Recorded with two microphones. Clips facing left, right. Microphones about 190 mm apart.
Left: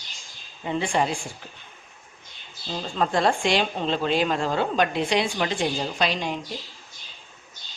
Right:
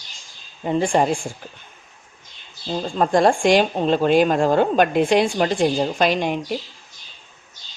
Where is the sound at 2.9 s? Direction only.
45° right (ahead or behind).